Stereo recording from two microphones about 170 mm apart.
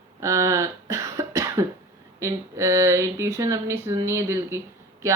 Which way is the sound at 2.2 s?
15° right (ahead or behind).